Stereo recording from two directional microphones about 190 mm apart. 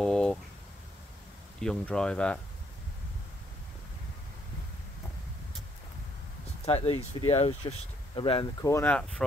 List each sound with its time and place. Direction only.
0.0 s a sound: 5° left (ahead or behind)
1.6 s speech: 5° left (ahead or behind)
6.6 s speech: 30° left (ahead or behind); by 9.2 s 5° left (ahead or behind)